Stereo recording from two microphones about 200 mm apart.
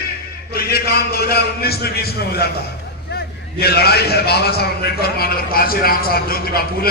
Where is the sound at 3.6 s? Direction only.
50° left (ahead or behind).